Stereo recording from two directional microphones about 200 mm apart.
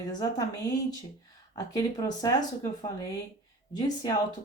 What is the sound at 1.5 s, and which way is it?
Speech, 20° left (ahead or behind).